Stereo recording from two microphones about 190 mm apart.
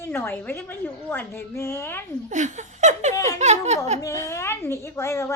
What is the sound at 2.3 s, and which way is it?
Speech, 40° right (ahead or behind).